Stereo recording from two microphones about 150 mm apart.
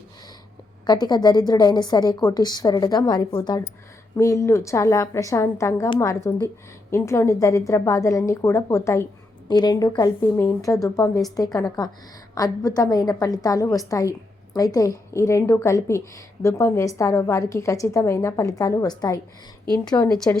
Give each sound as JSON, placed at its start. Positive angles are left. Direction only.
{"t": 0.9, "sound": "a woman's voice", "side_deg": 30}
{"t": 20.1, "sound": "speech", "side_deg": 5}